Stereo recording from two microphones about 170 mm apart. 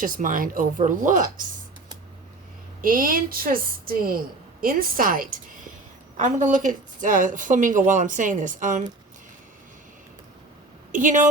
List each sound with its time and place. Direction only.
0.0 s a woman's voice: 50° right (ahead or behind)
2.8 s a woman's voice: 55° right (ahead or behind)
10.9 s a woman's voice: 50° right (ahead or behind)